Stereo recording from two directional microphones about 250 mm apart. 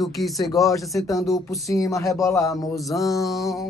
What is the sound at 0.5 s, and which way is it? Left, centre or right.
Speech, centre.